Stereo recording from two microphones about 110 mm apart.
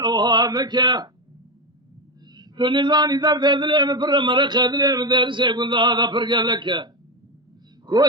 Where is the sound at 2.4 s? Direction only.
45° right (ahead or behind).